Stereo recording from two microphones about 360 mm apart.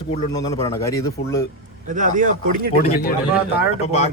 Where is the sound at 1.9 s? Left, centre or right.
Right.